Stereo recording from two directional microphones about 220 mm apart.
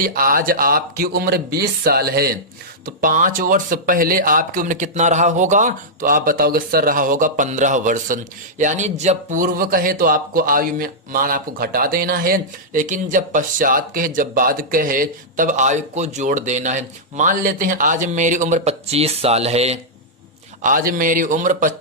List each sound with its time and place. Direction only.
0.0 s speech: 40° right (ahead or behind)